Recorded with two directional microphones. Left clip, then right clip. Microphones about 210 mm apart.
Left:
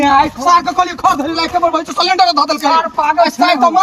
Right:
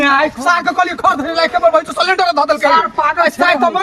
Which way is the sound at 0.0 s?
10° right (ahead or behind).